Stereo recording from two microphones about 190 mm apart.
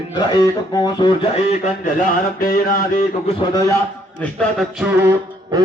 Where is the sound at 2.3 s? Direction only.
50° left (ahead or behind).